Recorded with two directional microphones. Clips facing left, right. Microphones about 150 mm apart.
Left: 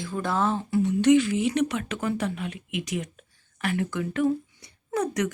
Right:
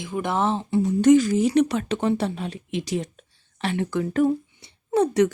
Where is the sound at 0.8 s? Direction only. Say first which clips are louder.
Right 3 dB; 40° right (ahead or behind).